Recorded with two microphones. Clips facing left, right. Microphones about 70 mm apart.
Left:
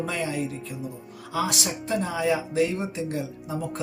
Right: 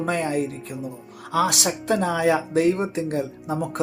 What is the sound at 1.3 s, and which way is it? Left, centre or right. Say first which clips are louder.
Speech: right 5 dB; right.